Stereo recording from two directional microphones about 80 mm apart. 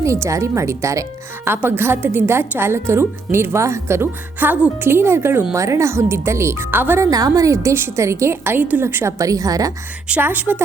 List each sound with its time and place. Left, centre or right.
0.0 s a woman's voice: right
1.5 s a woman's voice: right
4.4 s a woman's voice: right
7.0 s a woman's voice: right
9.1 s a woman's voice: right
10.2 s a woman's voice: right